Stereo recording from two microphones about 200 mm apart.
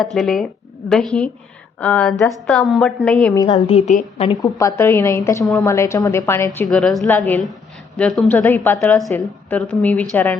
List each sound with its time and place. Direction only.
0.0 s a woman's voice: centre (ahead or behind)
3.3 s a woman's voice: 20° left (ahead or behind)
3.8 s a woman's voice: 35° left (ahead or behind)
4.3 s a woman's voice: 15° left (ahead or behind)